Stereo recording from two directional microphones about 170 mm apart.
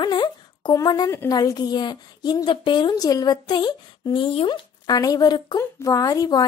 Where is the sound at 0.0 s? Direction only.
25° left (ahead or behind).